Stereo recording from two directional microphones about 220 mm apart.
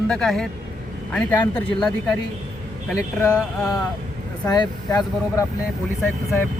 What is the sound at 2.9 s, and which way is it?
Speech, 10° left (ahead or behind).